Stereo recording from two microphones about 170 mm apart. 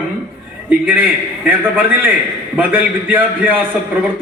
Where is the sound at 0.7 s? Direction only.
10° right (ahead or behind).